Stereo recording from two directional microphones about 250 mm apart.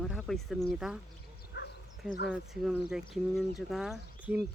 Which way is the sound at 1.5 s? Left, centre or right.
Left.